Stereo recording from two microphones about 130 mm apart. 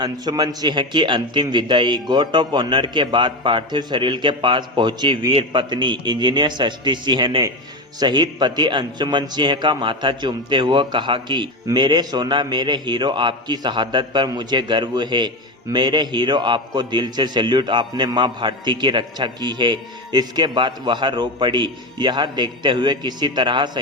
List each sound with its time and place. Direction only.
0.0 s a man's voice: 35° right (ahead or behind)